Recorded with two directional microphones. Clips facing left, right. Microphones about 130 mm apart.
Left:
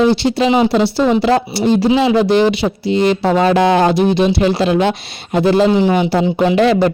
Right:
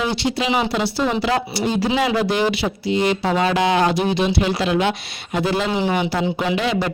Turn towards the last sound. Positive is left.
turn(degrees=40)  # may be behind; listen again after turning